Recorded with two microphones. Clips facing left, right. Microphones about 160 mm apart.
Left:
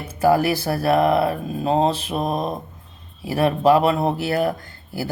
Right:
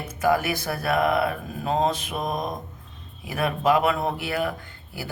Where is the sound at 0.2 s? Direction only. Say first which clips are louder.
Left 5 dB; 35° left (ahead or behind).